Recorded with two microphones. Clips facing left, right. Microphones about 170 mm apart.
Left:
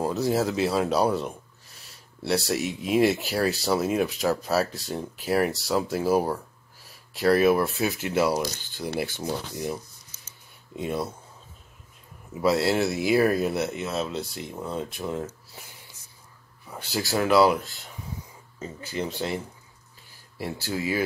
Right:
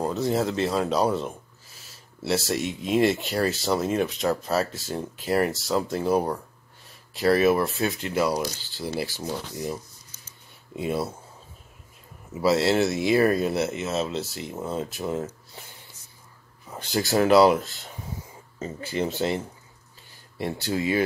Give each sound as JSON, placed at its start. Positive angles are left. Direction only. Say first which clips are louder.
{"t": 0.0, "sound": "speech", "louder": "even", "side_deg": 0}
{"t": 8.5, "sound": "speech", "louder": "even", "side_deg": 50}
{"t": 9.2, "sound": "speech", "louder": "left 1 dB", "side_deg": 10}
{"t": 10.8, "sound": "speech", "louder": "right 2 dB", "side_deg": -5}
{"t": 12.4, "sound": "speech", "louder": "right 2 dB", "side_deg": 0}
{"t": 16.7, "sound": "speech", "louder": "right 4 dB", "side_deg": -20}
{"t": 18.9, "sound": "speech", "louder": "right 3 dB", "side_deg": -25}
{"t": 20.7, "sound": "speech", "louder": "right 3 dB", "side_deg": -25}